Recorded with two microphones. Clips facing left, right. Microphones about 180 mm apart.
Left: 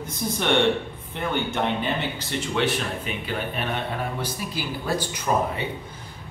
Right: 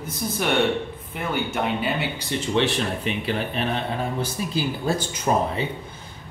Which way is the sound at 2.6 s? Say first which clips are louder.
Right 2 dB; 30° right (ahead or behind).